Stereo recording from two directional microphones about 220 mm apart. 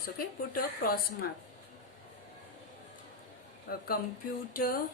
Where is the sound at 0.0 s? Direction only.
40° left (ahead or behind).